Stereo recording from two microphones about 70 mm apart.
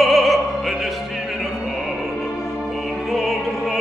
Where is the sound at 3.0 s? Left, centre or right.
Centre.